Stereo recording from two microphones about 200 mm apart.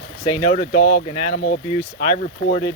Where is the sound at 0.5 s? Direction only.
45° left (ahead or behind).